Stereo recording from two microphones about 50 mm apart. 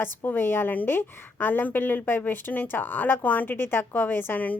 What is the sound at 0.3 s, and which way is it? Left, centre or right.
A woman's voice, left.